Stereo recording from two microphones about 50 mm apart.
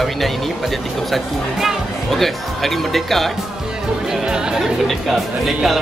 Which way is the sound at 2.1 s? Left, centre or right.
Centre.